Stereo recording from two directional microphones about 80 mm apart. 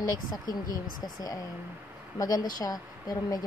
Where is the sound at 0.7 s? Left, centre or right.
Left.